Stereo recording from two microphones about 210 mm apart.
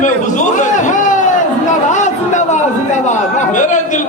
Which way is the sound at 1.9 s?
35° left (ahead or behind).